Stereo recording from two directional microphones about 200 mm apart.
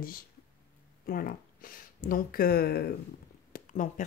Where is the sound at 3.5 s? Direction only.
40° left (ahead or behind).